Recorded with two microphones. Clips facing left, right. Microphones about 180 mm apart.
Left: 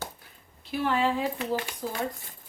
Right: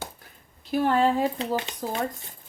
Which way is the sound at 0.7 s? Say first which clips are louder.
Right 4 dB; 45° right (ahead or behind).